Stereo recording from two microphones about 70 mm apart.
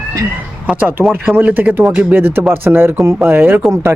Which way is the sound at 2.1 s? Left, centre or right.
Right.